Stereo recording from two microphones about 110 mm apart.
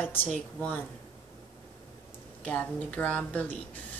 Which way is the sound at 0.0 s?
15° left (ahead or behind).